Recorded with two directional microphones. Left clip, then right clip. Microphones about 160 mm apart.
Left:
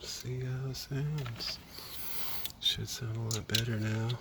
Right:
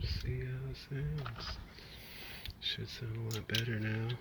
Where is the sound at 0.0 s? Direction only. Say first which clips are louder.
Left 3 dB; 30° left (ahead or behind).